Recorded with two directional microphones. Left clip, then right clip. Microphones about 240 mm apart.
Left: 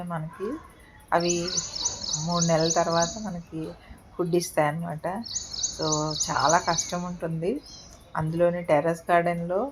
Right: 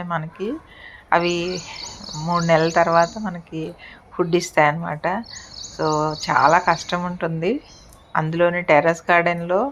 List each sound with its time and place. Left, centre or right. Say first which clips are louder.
0.0 s speech: right 7 dB; centre